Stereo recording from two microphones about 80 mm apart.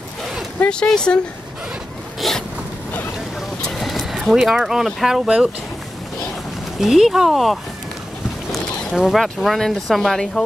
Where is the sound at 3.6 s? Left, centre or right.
Centre.